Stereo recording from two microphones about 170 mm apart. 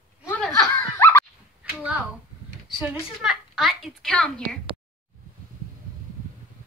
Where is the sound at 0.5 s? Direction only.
15° left (ahead or behind).